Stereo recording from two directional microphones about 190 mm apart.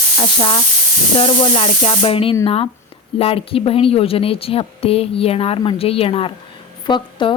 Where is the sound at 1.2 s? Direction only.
30° left (ahead or behind).